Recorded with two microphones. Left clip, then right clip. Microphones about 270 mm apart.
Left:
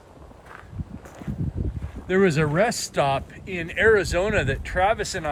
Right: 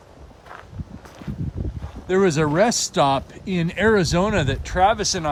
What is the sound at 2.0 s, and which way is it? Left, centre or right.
Speech, centre.